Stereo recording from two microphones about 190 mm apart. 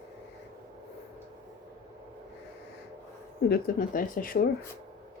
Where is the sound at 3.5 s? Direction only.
45° left (ahead or behind).